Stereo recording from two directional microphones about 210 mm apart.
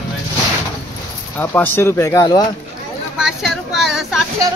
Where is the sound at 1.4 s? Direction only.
10° left (ahead or behind).